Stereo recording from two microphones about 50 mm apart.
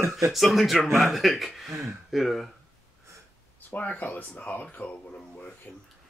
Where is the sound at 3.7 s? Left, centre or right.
Left.